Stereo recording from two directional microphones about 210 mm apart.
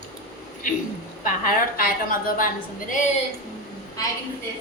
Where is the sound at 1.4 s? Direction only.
40° left (ahead or behind).